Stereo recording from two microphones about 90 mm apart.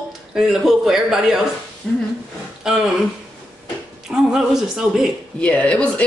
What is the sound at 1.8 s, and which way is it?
Speech, 10° left (ahead or behind).